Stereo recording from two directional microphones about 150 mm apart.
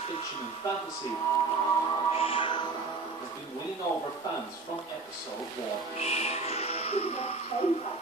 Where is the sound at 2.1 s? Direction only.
40° left (ahead or behind).